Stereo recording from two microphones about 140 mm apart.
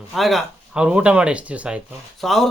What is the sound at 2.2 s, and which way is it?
Speech, centre (ahead or behind).